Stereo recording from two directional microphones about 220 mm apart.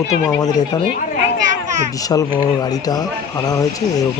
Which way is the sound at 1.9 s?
15° left (ahead or behind).